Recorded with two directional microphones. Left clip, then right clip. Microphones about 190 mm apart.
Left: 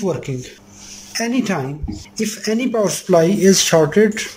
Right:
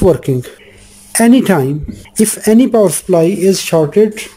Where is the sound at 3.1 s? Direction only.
10° right (ahead or behind).